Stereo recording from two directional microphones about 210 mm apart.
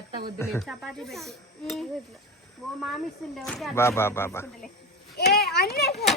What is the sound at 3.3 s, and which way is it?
Speech, centre (ahead or behind).